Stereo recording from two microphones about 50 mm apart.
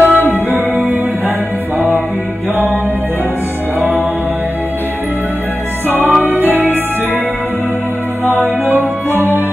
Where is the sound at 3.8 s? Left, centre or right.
Right.